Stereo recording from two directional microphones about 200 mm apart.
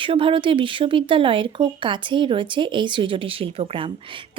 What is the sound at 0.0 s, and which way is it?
Speech, 25° right (ahead or behind).